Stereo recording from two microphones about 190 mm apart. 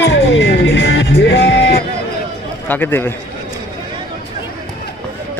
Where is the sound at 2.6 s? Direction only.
10° left (ahead or behind).